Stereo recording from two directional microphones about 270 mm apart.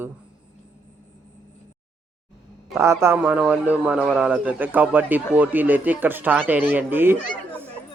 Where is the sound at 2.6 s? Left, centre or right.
Centre.